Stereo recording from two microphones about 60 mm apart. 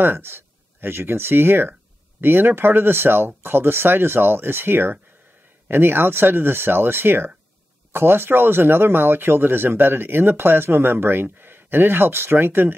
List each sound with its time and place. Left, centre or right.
0.0 s speech: right